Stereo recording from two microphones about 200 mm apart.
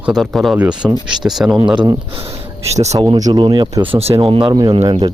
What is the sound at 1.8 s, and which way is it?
Speech, 25° right (ahead or behind).